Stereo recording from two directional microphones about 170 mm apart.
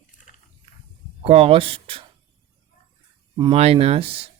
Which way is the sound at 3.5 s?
35° right (ahead or behind).